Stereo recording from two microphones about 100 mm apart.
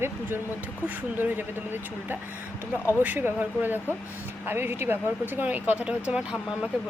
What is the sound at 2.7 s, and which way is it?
Speech, 25° left (ahead or behind).